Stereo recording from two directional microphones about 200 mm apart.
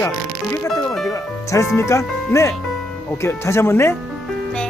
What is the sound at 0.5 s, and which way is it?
Music, 15° left (ahead or behind).